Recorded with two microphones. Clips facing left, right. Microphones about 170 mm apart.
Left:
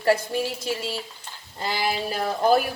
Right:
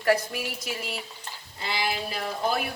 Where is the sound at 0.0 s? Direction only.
30° left (ahead or behind).